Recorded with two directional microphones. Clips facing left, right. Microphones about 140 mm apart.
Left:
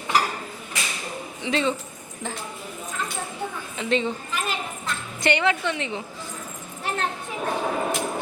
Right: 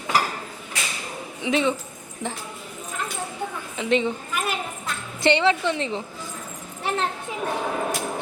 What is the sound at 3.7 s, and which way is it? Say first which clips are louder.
Speech: right 2 dB; 15° right (ahead or behind).